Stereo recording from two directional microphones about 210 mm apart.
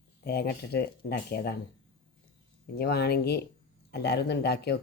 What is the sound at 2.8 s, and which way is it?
Speech, 50° left (ahead or behind).